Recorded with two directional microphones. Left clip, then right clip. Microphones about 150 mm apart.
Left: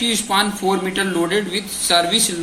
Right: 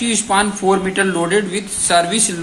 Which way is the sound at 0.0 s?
45° right (ahead or behind).